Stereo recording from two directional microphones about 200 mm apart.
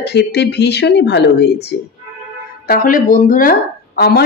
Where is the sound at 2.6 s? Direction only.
45° left (ahead or behind).